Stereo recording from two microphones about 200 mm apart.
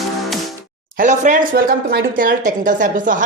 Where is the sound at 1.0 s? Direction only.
40° right (ahead or behind).